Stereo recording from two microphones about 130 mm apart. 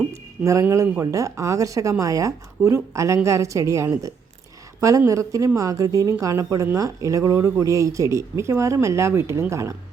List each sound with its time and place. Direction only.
0.1 s speech: 20° right (ahead or behind)